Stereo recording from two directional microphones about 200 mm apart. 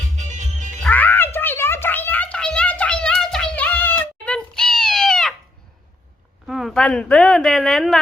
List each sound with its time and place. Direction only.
0.2 s music: 35° right (ahead or behind)
0.8 s music: 10° left (ahead or behind)
6.5 s a woman's voice: centre (ahead or behind)